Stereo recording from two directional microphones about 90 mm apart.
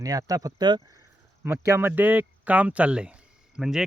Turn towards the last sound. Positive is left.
turn(degrees=-5)  # may be behind; listen again after turning